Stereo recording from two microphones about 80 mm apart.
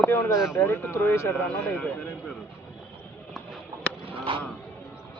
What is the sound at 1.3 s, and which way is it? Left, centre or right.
Speech, centre.